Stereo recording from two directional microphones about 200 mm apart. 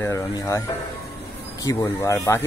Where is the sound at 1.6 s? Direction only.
15° left (ahead or behind).